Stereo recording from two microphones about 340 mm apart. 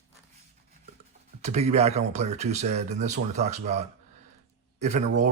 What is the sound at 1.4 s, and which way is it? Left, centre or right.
A man's voice, centre.